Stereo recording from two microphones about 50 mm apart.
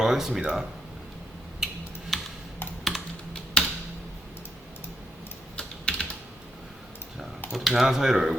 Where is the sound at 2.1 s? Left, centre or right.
Centre.